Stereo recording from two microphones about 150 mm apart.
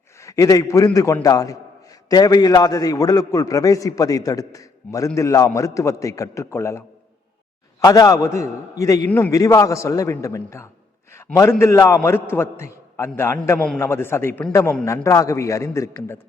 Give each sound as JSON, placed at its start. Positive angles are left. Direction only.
{"t": 0.2, "sound": "a man's voice", "side_deg": 20}